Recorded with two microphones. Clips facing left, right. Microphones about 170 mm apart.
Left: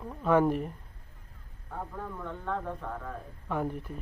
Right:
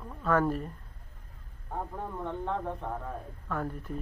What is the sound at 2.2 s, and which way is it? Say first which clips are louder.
Speech: right 2 dB; 20° right (ahead or behind).